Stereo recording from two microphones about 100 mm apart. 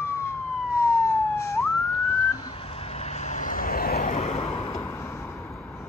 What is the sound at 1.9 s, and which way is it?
Police car, 40° left (ahead or behind).